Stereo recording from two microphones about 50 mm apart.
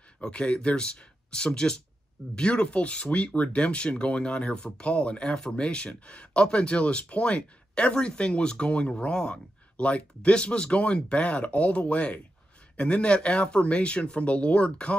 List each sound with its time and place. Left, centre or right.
0.2 s speech: left